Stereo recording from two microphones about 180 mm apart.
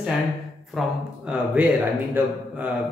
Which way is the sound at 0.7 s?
5° right (ahead or behind).